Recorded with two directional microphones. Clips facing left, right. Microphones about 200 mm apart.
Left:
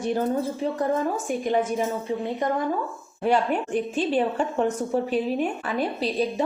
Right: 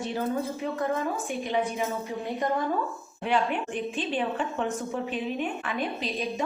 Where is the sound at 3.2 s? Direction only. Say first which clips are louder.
Left 4 dB; 40° left (ahead or behind).